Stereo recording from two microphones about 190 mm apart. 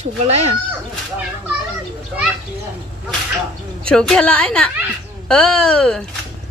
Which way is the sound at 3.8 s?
5° left (ahead or behind).